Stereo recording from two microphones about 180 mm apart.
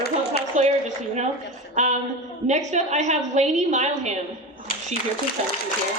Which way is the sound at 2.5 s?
40° right (ahead or behind).